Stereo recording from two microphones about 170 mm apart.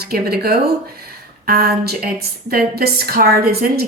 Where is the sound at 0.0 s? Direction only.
65° right (ahead or behind).